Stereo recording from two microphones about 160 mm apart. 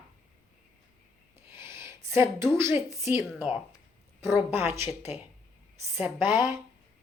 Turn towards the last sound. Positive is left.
turn(degrees=-15)  # may be behind; listen again after turning